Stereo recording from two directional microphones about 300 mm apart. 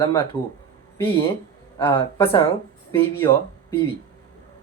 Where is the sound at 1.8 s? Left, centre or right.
Centre.